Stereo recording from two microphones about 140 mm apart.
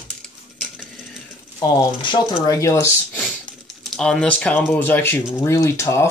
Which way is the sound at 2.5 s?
20° left (ahead or behind).